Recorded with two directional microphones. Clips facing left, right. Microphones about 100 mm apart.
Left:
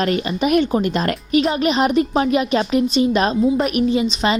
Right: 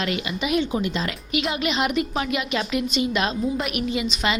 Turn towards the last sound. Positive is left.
turn(degrees=30)  # may be behind; listen again after turning